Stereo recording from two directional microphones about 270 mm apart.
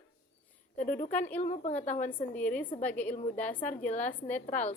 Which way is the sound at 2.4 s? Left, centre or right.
Centre.